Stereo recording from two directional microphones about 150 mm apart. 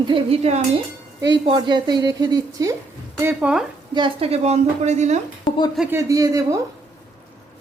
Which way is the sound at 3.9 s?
35° right (ahead or behind).